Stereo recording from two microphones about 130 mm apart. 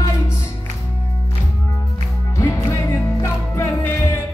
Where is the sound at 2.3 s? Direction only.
25° left (ahead or behind).